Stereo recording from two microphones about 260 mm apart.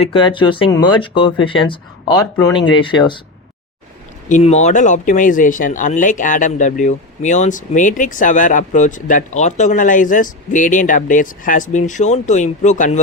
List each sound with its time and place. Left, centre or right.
0.0 s speech: centre
4.3 s speech: left